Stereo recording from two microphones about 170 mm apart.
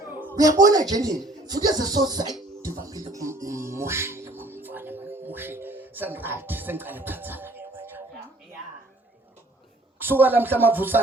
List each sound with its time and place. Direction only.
0.4 s speech: 20° right (ahead or behind)
3.1 s music: 15° right (ahead or behind)
10.0 s speech: 10° right (ahead or behind)